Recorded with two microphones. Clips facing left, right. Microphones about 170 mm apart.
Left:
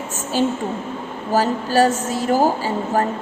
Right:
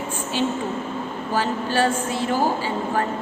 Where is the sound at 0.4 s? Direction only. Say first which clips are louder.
Left 4 dB; 40° left (ahead or behind).